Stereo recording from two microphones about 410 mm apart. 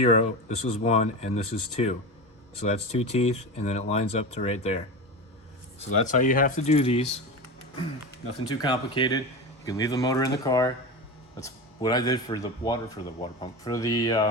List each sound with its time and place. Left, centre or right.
0.0 s speech: centre
5.8 s speech: centre